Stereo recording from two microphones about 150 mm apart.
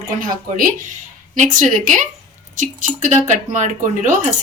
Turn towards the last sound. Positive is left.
turn(degrees=-60)  # may be behind; listen again after turning